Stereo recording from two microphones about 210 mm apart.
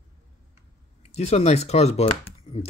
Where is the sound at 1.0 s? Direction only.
30° left (ahead or behind).